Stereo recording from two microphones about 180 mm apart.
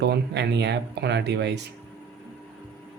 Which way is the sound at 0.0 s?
70° right (ahead or behind).